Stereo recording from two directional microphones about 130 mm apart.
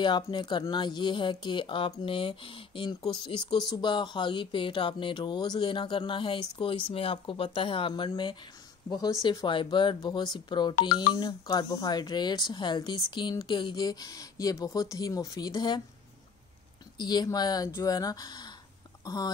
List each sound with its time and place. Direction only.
0.0 s speech: 35° left (ahead or behind)
3.5 s speech: 30° left (ahead or behind)
17.0 s speech: 35° left (ahead or behind)